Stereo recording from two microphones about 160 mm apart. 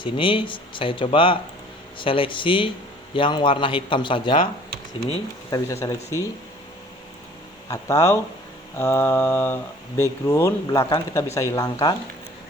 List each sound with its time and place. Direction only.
0.0 s speech: 35° left (ahead or behind)
5.8 s speech: 20° left (ahead or behind)
7.7 s speech: 20° left (ahead or behind)
8.8 s mantra: 15° left (ahead or behind)
10.0 s speech: 20° left (ahead or behind)